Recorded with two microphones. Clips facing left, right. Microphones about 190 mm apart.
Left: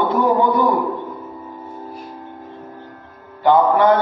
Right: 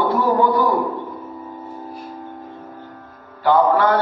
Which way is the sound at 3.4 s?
20° left (ahead or behind).